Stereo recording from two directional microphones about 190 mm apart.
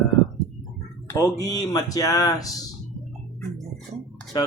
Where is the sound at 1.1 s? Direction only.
15° left (ahead or behind).